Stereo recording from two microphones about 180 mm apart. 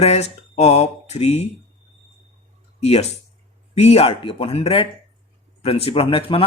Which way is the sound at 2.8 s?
35° left (ahead or behind).